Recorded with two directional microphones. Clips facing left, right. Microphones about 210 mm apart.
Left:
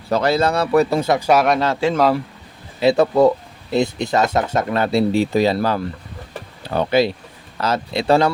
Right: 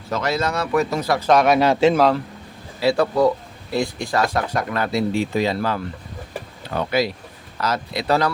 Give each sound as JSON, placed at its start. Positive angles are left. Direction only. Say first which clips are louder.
{"t": 0.1, "sound": "speech", "louder": "left 5 dB", "side_deg": 30}
{"t": 1.3, "sound": "speech", "louder": "right 1 dB", "side_deg": 5}
{"t": 1.5, "sound": "a man's voice", "louder": "right 3 dB", "side_deg": -15}
{"t": 2.0, "sound": "speech", "louder": "left 1 dB", "side_deg": 5}
{"t": 2.8, "sound": "speech", "louder": "left 4 dB", "side_deg": 20}